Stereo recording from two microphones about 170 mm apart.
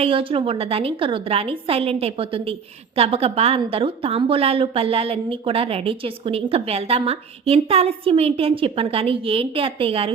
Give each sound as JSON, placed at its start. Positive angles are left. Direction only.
{"t": 0.0, "sound": "a woman's voice", "side_deg": -30}